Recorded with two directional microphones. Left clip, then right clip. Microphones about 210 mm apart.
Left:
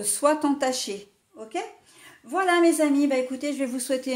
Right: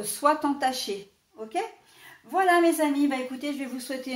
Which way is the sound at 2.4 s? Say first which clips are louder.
Left 1 dB; 45° left (ahead or behind).